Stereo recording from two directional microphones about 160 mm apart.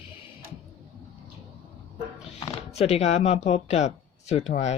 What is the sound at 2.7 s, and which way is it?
Speech, 40° left (ahead or behind).